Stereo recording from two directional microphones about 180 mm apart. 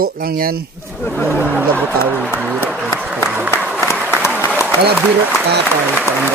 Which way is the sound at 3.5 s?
10° right (ahead or behind).